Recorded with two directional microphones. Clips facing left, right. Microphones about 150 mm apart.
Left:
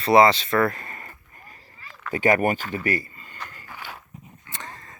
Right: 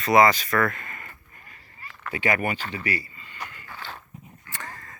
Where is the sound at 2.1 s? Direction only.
40° left (ahead or behind).